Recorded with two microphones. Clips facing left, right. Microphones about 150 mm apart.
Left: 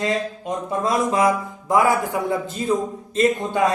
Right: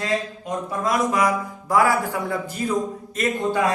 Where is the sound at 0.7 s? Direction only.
25° left (ahead or behind).